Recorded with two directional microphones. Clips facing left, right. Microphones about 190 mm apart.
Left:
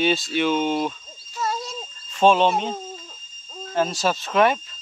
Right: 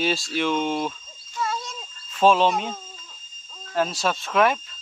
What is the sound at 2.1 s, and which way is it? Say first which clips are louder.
Speech: left 1 dB; centre (ahead or behind).